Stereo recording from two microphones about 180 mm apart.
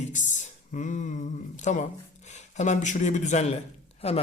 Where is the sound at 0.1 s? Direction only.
45° left (ahead or behind).